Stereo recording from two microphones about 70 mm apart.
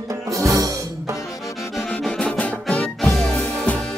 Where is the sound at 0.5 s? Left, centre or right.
Right.